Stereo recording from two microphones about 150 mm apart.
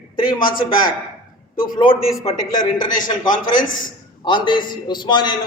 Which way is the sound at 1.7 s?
35° left (ahead or behind).